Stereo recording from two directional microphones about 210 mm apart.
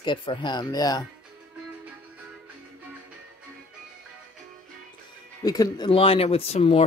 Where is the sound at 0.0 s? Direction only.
25° left (ahead or behind).